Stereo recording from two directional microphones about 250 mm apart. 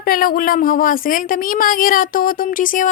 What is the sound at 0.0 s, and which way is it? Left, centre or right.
A woman's voice, left.